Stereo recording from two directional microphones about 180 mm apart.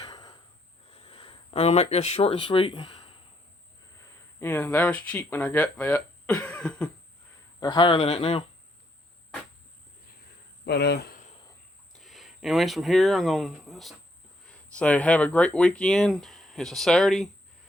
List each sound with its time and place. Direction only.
0.0 s a sound: 20° left (ahead or behind)
0.9 s speech: 30° left (ahead or behind)
4.4 s speech: 10° left (ahead or behind)
7.6 s speech: 25° left (ahead or behind)
10.7 s speech: 65° left (ahead or behind)
11.9 s speech: centre (ahead or behind)